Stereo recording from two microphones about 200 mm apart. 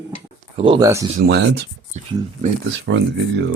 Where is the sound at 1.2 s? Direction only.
55° right (ahead or behind).